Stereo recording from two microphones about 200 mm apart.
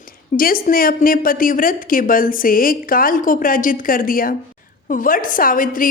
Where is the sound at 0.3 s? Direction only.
45° left (ahead or behind).